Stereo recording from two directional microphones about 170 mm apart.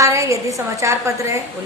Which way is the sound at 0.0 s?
20° right (ahead or behind).